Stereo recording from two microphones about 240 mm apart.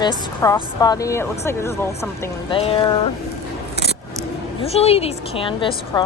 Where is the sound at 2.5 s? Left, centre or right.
Left.